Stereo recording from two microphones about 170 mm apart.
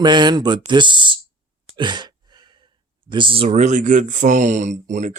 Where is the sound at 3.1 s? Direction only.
30° right (ahead or behind).